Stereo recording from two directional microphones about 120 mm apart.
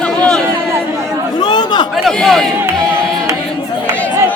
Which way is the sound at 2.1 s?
Centre (ahead or behind).